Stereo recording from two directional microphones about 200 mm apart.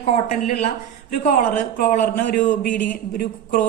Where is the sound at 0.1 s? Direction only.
35° left (ahead or behind).